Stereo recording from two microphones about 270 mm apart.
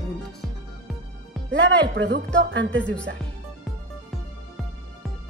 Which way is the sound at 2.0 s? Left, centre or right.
Right.